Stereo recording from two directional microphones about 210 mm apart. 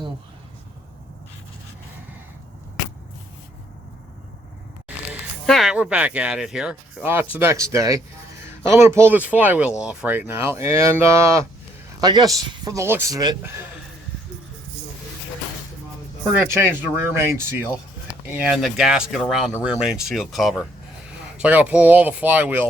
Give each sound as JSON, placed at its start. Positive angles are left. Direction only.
{"t": 5.5, "sound": "speech", "side_deg": 0}
{"t": 16.5, "sound": "speech", "side_deg": -10}